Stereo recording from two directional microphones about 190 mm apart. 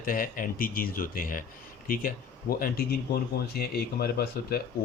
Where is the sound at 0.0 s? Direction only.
50° left (ahead or behind).